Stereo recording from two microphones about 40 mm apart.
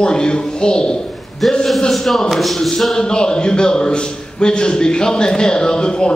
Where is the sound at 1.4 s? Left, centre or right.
Centre.